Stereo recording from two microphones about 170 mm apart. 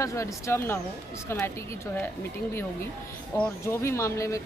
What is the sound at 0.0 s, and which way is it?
Speech, 20° left (ahead or behind).